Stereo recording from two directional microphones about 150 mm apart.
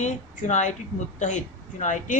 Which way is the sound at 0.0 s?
50° left (ahead or behind).